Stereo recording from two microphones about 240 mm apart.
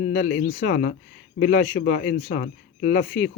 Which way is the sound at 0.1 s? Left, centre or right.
Left.